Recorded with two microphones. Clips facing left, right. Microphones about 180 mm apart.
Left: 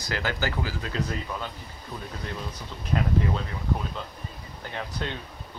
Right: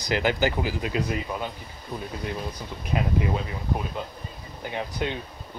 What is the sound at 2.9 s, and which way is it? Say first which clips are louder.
Speech: even; 10° right (ahead or behind).